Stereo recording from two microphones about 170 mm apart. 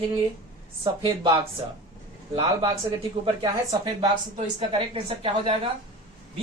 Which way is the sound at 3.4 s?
25° right (ahead or behind).